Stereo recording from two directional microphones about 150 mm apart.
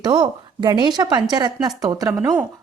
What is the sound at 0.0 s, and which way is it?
A woman's voice, 30° right (ahead or behind).